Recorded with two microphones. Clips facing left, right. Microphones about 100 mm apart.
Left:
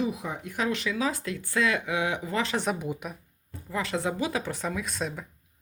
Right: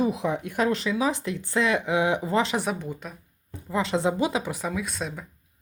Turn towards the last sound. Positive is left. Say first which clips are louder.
# right 1 dB
turn(degrees=0)  # may be behind; listen again after turning